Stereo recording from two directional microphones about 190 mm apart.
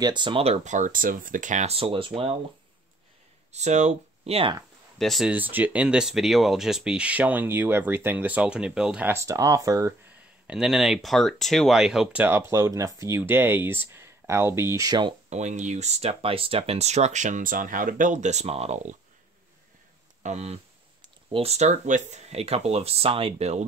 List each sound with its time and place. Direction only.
0.0 s speech: 25° right (ahead or behind)
3.5 s speech: 35° right (ahead or behind)
4.9 s speech: centre (ahead or behind); by 9.9 s 15° right (ahead or behind)
10.4 s speech: 5° right (ahead or behind); by 15.1 s 20° right (ahead or behind)
15.2 s speech: 35° right (ahead or behind)
20.2 s speech: 35° right (ahead or behind)